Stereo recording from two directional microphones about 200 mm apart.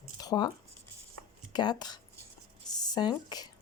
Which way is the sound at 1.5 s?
20° left (ahead or behind).